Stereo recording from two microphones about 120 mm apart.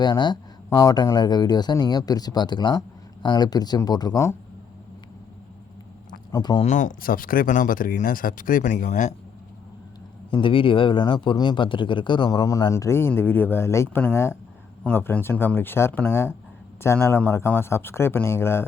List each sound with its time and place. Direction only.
0.0 s speech: 35° left (ahead or behind)
6.3 s speech: 35° left (ahead or behind)
6.6 s speech: 80° left
10.3 s a man's voice: 45° left (ahead or behind); by 18.6 s 20° left (ahead or behind)